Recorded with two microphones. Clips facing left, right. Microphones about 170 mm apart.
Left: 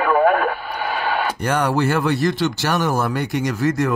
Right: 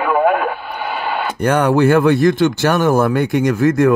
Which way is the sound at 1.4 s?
55° right (ahead or behind).